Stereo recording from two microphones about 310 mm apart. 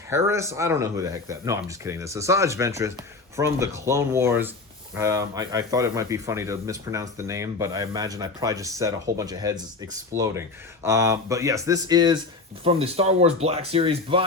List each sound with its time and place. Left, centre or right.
0.3 s speech: centre